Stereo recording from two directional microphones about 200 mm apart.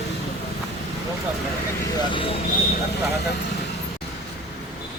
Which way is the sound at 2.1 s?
25° left (ahead or behind).